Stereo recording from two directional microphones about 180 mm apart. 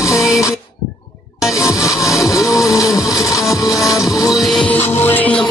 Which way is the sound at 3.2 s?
Centre (ahead or behind).